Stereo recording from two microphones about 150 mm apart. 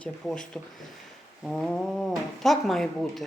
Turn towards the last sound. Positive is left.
turn(degrees=0)  # may be behind; listen again after turning